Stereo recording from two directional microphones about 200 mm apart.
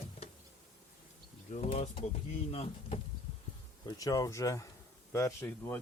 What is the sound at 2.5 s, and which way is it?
Speech, 30° left (ahead or behind).